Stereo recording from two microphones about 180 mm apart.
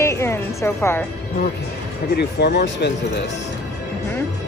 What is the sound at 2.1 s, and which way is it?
Speech, 70° left (ahead or behind).